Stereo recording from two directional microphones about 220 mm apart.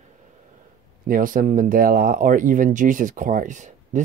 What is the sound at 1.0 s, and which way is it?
Speech, 40° right (ahead or behind).